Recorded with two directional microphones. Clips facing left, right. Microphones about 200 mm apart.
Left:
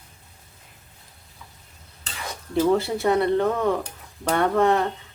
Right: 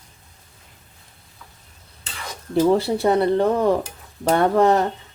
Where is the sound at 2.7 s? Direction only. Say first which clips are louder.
Right 3 dB; 30° right (ahead or behind).